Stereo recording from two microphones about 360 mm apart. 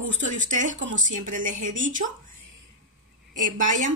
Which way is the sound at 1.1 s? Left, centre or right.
Right.